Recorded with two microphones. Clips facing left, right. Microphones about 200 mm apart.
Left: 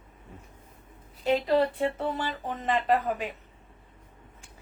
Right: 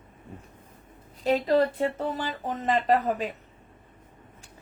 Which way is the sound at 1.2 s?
35° right (ahead or behind).